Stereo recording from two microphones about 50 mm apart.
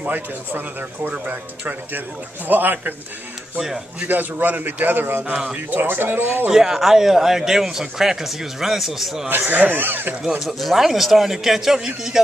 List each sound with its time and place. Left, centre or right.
0.0 s a man's voice: right
4.0 s a man's voice: right
5.3 s speech: right
5.7 s speech: right
6.5 s a man's voice: centre
9.5 s a man's voice: right
10.4 s speech: centre